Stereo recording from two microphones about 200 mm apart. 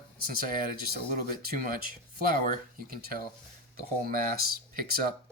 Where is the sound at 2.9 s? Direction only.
45° right (ahead or behind).